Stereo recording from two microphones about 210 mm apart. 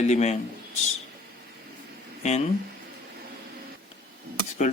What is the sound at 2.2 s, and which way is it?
Speech, 30° left (ahead or behind).